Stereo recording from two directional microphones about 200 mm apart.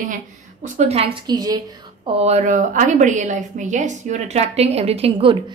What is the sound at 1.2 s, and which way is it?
Speech, 20° right (ahead or behind).